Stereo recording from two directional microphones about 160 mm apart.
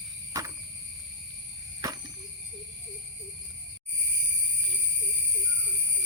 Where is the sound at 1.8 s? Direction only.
20° right (ahead or behind).